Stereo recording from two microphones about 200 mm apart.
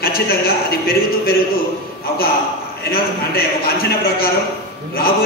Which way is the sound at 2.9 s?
50° left (ahead or behind).